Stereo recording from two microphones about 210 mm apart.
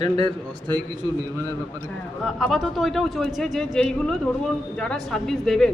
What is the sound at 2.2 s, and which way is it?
Speech, centre (ahead or behind).